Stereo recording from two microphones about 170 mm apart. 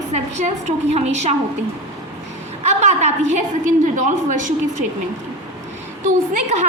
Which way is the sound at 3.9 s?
50° right (ahead or behind).